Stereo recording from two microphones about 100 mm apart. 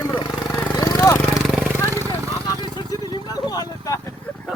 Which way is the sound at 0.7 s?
35° left (ahead or behind).